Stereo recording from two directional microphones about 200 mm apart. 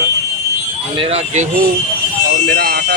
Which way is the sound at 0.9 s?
30° right (ahead or behind).